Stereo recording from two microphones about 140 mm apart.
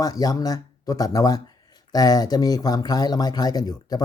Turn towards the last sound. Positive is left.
turn(degrees=30)  # may be behind; listen again after turning